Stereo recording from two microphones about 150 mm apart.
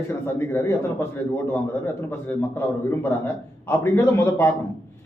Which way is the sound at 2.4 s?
15° left (ahead or behind).